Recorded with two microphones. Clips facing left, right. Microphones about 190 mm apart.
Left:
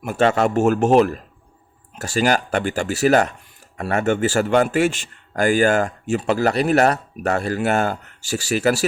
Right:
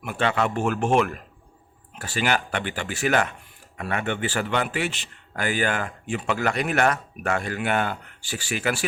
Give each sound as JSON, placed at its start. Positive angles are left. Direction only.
{"t": 0.0, "sound": "a man's voice", "side_deg": 40}